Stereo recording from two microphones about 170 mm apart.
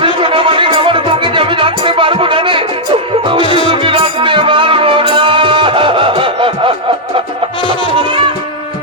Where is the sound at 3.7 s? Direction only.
30° right (ahead or behind).